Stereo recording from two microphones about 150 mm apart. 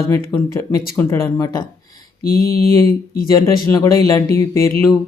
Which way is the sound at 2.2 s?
80° left.